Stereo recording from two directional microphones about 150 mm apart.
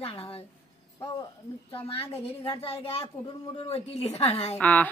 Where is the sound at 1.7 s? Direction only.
40° left (ahead or behind).